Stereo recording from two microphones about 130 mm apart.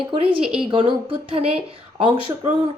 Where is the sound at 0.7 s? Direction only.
40° right (ahead or behind).